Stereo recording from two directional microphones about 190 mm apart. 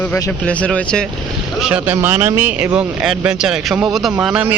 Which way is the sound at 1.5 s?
5° right (ahead or behind).